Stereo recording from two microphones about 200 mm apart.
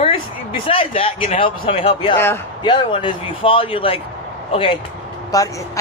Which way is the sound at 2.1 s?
10° left (ahead or behind).